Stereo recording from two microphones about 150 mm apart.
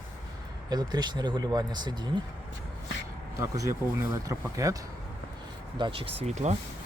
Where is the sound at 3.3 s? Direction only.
20° right (ahead or behind).